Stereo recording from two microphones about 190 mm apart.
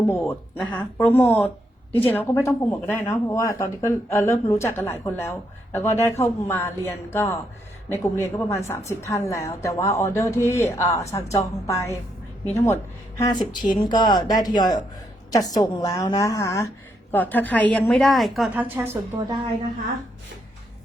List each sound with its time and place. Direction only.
0.1 s a woman's voice: 15° left (ahead or behind); by 18.6 s centre (ahead or behind)
19.1 s a woman's voice: 15° right (ahead or behind)